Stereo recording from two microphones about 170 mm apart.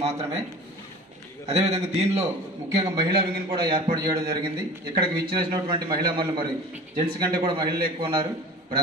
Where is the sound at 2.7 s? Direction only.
25° right (ahead or behind).